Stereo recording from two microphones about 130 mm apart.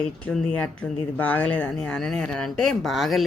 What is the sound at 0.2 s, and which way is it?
Speech, 5° left (ahead or behind).